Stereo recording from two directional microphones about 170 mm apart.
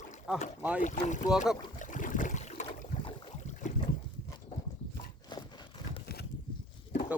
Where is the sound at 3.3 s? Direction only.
45° left (ahead or behind).